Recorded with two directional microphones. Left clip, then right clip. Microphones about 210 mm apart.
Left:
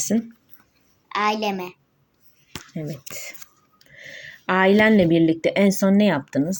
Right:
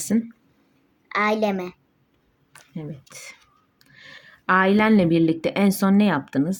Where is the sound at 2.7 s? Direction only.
5° left (ahead or behind).